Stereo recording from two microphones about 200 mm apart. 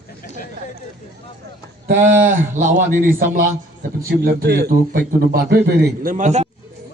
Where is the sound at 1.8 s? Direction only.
40° right (ahead or behind).